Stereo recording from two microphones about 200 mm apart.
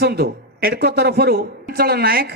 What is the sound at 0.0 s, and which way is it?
A man's voice, 50° right (ahead or behind).